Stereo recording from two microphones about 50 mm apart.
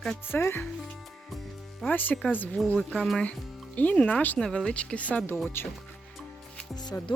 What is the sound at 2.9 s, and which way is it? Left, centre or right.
Speech, centre.